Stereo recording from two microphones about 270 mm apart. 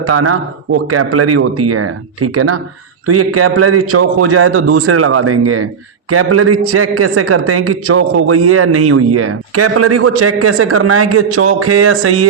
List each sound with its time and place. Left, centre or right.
0.0 s a man's voice: right